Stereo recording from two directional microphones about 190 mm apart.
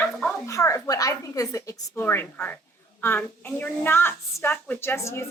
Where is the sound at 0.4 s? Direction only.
15° left (ahead or behind).